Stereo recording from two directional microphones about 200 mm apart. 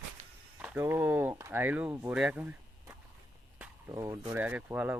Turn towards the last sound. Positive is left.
turn(degrees=-5)  # may be behind; listen again after turning